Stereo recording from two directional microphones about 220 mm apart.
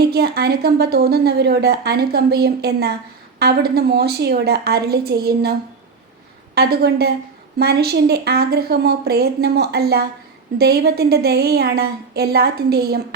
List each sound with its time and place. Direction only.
0.1 s a woman's voice: 45° right (ahead or behind)